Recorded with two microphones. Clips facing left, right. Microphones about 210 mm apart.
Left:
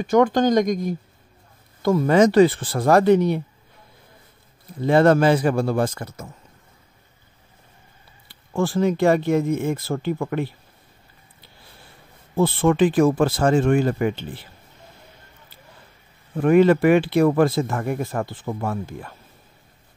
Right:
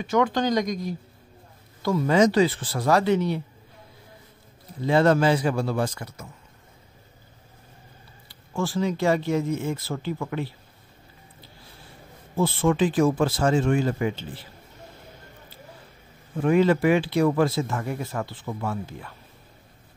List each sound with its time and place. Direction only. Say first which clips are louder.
0.0 s speech: left 6 dB; 45° left (ahead or behind)
4.8 s speech: left 4 dB; 55° left (ahead or behind)
8.3 s speech: left 5 dB; 55° left (ahead or behind)
12.4 s speech: left 4 dB; 60° left (ahead or behind)
16.3 s speech: left 5 dB; 55° left (ahead or behind)